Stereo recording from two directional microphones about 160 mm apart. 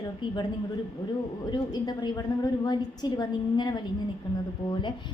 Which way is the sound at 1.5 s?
25° left (ahead or behind).